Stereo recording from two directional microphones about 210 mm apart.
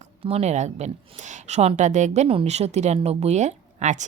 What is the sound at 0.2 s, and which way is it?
A woman's voice, 30° right (ahead or behind).